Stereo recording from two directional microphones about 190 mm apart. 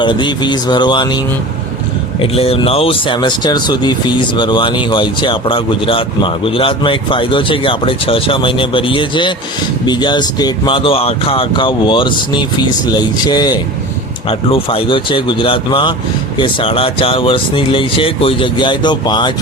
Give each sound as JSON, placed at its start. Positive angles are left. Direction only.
{"t": 0.0, "sound": "speech", "side_deg": 25}
{"t": 2.3, "sound": "speech", "side_deg": 30}